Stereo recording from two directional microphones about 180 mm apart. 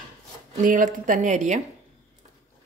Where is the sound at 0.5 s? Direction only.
45° right (ahead or behind).